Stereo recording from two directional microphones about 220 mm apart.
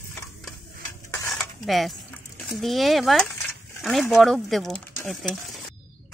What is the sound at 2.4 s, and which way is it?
Speech, centre (ahead or behind).